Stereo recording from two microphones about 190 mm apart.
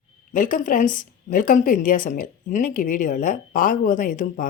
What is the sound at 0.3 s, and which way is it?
A woman's voice, 45° left (ahead or behind).